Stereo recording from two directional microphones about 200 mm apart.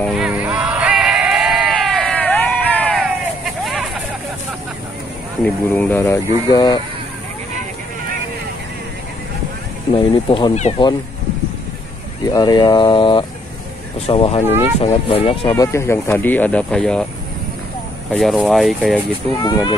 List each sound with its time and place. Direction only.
0.0 s music: centre (ahead or behind)
5.4 s speech: 10° left (ahead or behind)
9.9 s speech: 25° left (ahead or behind)
12.3 s speech: 20° left (ahead or behind)
15.5 s speech: 15° left (ahead or behind)
18.1 s speech: centre (ahead or behind)
19.3 s speech: 20° left (ahead or behind)